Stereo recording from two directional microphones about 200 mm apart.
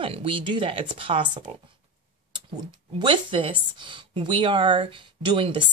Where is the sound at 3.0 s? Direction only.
25° right (ahead or behind).